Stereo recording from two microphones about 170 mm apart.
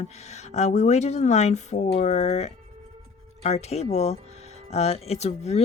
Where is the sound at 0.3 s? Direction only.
40° left (ahead or behind).